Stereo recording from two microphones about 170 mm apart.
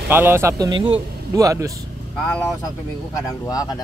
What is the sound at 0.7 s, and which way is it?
Speech, 30° right (ahead or behind).